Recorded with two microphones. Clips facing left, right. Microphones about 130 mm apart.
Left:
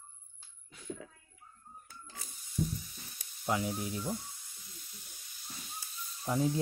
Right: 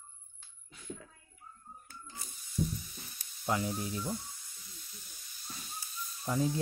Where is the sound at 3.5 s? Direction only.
10° left (ahead or behind).